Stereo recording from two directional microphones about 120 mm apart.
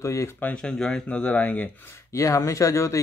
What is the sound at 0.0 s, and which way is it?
Speech, 25° left (ahead or behind).